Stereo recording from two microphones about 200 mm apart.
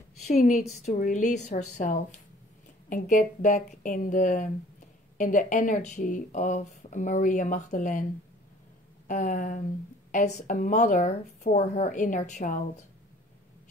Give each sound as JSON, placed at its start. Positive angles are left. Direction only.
{"t": 0.2, "sound": "a woman's voice", "side_deg": 35}
{"t": 9.0, "sound": "speech", "side_deg": 40}